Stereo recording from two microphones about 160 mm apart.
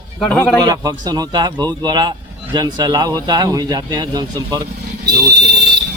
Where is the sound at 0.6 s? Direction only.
25° right (ahead or behind).